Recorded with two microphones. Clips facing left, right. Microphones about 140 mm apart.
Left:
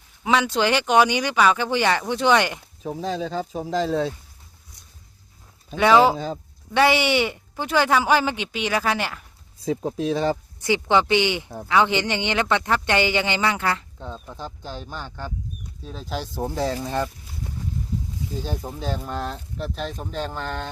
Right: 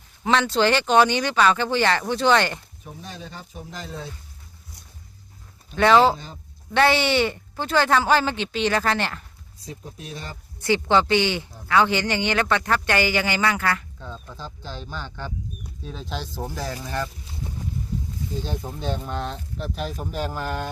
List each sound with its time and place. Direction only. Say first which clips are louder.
0.3 s speech: right 1 dB; 10° left (ahead or behind)
2.8 s speech: left 12 dB; 90° left
5.7 s speech: even; 10° left (ahead or behind)
10.6 s a man's voice: right 1 dB; 15° left (ahead or behind)
18.4 s speech: left 1 dB; 5° left (ahead or behind); by 20.7 s 10° right (ahead or behind)